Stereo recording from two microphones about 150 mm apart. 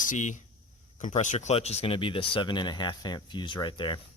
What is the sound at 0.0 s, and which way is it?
Speech, 55° left (ahead or behind).